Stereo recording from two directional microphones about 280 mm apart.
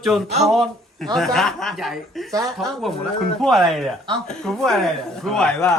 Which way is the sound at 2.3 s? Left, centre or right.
Centre.